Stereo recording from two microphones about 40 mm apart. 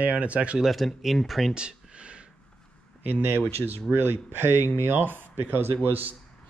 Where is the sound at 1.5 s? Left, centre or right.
Right.